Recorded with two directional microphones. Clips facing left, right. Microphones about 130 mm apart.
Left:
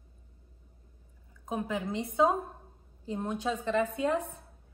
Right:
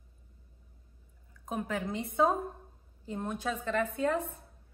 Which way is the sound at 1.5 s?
20° left (ahead or behind).